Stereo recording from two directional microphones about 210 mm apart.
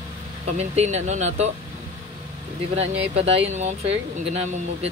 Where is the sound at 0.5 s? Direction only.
30° right (ahead or behind).